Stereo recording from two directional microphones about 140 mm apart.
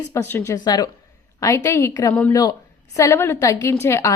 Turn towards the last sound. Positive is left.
turn(degrees=20)  # may be behind; listen again after turning